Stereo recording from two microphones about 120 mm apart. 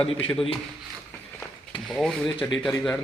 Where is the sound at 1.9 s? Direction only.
Centre (ahead or behind).